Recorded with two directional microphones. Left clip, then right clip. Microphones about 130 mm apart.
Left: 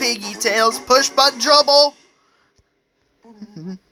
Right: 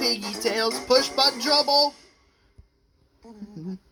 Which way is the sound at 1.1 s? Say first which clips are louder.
Left 7 dB; 40° left (ahead or behind).